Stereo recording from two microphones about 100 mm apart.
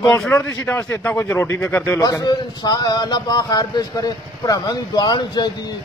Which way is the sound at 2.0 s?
40° left (ahead or behind).